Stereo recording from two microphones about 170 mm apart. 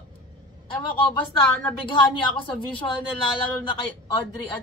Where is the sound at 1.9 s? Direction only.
30° left (ahead or behind).